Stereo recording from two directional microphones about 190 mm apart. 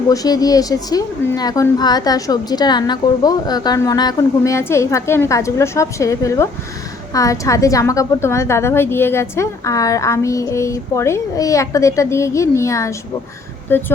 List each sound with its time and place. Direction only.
0.1 s a woman's voice: 20° left (ahead or behind)